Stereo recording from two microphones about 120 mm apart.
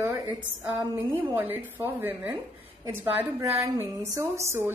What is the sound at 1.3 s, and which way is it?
A woman's voice, 15° right (ahead or behind).